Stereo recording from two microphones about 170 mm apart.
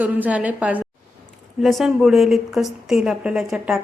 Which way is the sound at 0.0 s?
10° right (ahead or behind).